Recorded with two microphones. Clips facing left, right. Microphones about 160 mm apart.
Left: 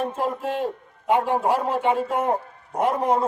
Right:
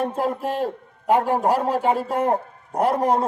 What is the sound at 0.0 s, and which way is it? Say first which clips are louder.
A man's voice: right 2 dB; 40° right (ahead or behind).